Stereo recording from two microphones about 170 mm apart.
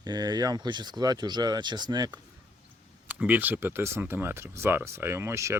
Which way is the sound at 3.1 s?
10° right (ahead or behind).